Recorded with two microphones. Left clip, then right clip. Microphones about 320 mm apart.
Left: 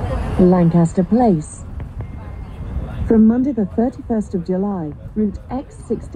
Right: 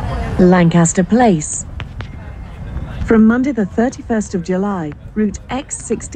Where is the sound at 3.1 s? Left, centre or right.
Left.